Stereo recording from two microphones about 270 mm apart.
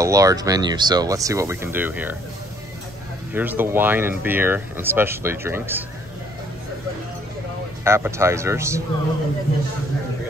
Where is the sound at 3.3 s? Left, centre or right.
Centre.